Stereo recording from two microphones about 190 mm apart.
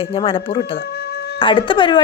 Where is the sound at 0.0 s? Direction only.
30° left (ahead or behind).